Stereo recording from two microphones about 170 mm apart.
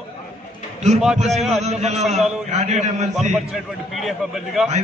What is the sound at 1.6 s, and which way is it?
A man's voice, 40° right (ahead or behind).